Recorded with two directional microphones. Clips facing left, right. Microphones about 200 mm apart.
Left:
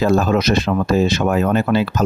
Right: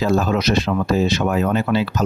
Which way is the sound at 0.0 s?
50° left (ahead or behind).